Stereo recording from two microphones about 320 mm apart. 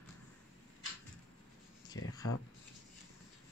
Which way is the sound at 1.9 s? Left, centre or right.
Left.